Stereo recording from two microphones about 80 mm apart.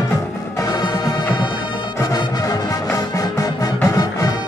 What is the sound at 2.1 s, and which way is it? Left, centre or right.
Music, left.